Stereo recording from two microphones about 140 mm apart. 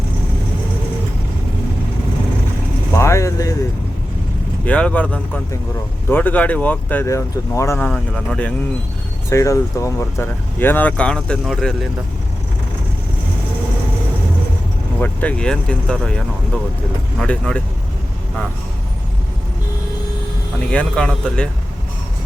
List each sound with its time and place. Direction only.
2.9 s vehicle: 20° left (ahead or behind)
4.6 s speech: 10° left (ahead or behind)
7.9 s speech: 5° left (ahead or behind)
9.3 s speech: 20° left (ahead or behind); by 11.9 s 5° left (ahead or behind)
14.9 s speech: 10° left (ahead or behind)
20.7 s speech: 5° left (ahead or behind)